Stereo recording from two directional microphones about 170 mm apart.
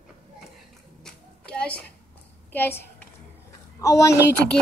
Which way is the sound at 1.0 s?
5° left (ahead or behind).